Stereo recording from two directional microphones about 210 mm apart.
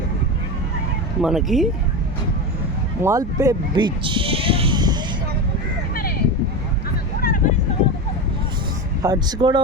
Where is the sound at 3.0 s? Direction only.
15° right (ahead or behind).